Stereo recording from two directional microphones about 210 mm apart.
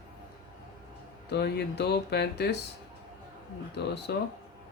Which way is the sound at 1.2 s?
50° left (ahead or behind).